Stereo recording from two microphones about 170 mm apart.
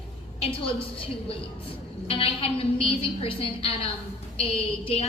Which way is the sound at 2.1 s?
35° left (ahead or behind).